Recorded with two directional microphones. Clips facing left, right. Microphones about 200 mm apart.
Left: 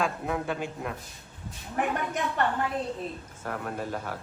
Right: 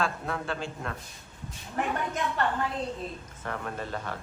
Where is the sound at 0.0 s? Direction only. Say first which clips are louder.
Left 2 dB; 15° left (ahead or behind).